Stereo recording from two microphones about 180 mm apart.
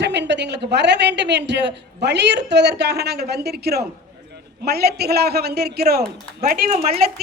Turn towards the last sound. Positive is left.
turn(degrees=-35)  # may be behind; listen again after turning